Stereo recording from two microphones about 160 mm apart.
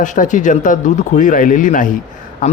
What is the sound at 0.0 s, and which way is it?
A man's voice, 50° left (ahead or behind).